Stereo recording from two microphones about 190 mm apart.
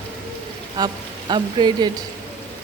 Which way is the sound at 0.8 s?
20° right (ahead or behind).